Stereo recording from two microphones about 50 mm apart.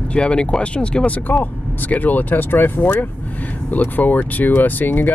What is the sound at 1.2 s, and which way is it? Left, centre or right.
Speech, left.